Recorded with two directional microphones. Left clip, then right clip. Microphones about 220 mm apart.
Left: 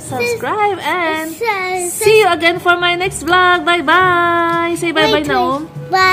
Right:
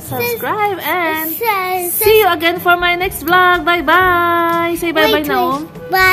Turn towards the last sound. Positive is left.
turn(degrees=-20)  # may be behind; listen again after turning